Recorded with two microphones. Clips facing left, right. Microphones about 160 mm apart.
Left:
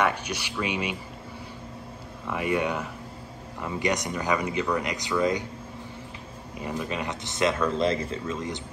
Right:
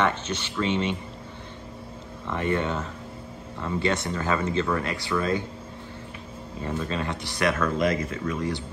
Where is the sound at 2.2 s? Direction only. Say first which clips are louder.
Even; 10° left (ahead or behind).